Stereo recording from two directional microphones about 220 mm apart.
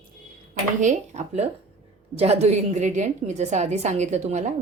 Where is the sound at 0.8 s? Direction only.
35° right (ahead or behind).